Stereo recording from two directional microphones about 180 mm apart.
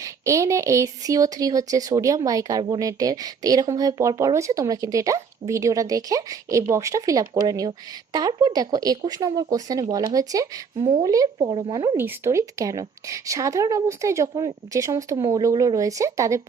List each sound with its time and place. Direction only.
0.0 s speech: 15° right (ahead or behind)
11.9 s a woman's voice: 15° right (ahead or behind)